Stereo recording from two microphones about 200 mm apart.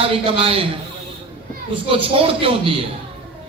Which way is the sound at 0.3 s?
30° right (ahead or behind).